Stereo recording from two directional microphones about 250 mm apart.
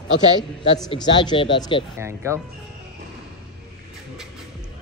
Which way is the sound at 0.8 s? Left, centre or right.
Centre.